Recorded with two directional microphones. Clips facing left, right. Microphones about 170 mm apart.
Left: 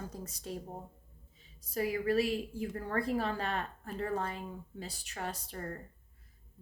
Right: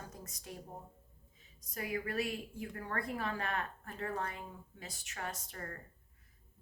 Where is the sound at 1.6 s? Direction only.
30° left (ahead or behind).